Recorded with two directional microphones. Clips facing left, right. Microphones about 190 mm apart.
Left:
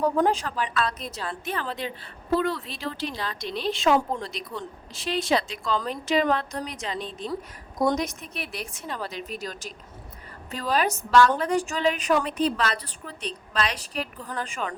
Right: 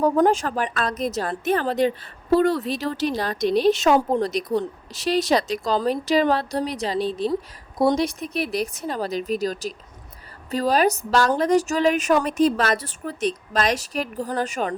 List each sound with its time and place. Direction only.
0.0 s a woman's voice: 45° right (ahead or behind)